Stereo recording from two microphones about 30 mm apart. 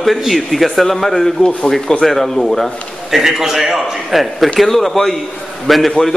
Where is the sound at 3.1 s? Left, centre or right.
Centre.